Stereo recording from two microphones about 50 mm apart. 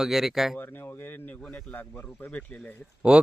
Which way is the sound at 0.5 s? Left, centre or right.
Left.